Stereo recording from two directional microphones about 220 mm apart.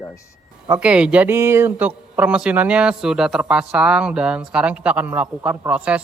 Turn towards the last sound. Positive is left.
turn(degrees=-5)  # may be behind; listen again after turning